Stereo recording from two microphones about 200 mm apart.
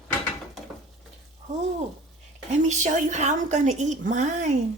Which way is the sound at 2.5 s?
35° right (ahead or behind).